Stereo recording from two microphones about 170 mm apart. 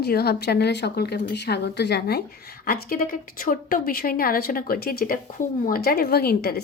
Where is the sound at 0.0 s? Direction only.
70° left (ahead or behind).